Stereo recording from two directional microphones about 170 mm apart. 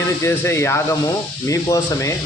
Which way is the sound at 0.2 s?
15° left (ahead or behind).